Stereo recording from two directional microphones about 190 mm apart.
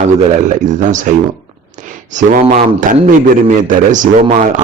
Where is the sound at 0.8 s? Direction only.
40° right (ahead or behind).